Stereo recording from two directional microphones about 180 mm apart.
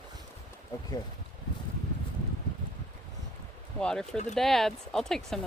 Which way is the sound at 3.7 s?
5° left (ahead or behind).